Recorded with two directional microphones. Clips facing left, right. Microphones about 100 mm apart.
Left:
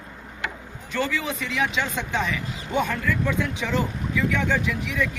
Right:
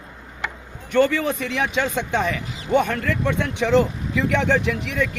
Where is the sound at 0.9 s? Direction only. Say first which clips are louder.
Right 8 dB; 55° right (ahead or behind).